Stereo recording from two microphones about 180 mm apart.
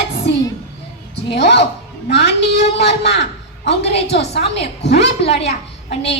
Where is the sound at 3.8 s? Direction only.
35° left (ahead or behind).